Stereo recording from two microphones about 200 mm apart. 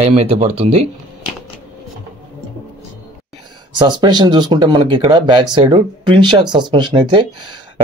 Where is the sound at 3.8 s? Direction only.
20° right (ahead or behind).